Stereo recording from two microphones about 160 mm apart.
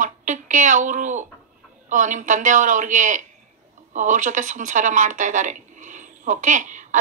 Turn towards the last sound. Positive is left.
turn(degrees=-50)  # may be behind; listen again after turning